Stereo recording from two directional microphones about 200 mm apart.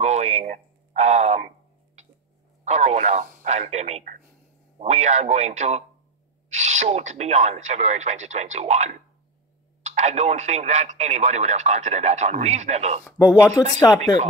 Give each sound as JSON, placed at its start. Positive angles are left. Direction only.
{"t": 0.0, "sound": "a sound", "side_deg": -35}
{"t": 2.6, "sound": "speech", "side_deg": -35}
{"t": 13.7, "sound": "speech", "side_deg": 15}